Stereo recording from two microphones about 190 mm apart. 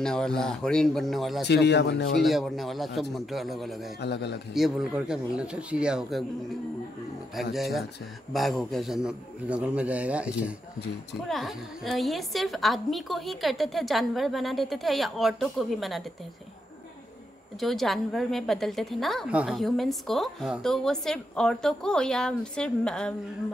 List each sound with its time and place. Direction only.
0.0 s a woman's voice: 5° left (ahead or behind)
1.5 s a man's voice: 60° left (ahead or behind)
2.2 s a woman's voice: centre (ahead or behind)
4.0 s a man's voice: 60° left (ahead or behind)
4.6 s a woman's voice: centre (ahead or behind)
7.5 s a woman's voice: centre (ahead or behind)
17.6 s a woman's voice: centre (ahead or behind)